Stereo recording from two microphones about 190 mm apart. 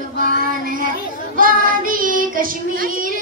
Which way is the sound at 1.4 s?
50° right (ahead or behind).